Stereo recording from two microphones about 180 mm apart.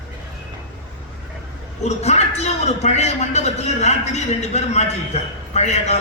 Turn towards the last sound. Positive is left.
turn(degrees=35)  # may be behind; listen again after turning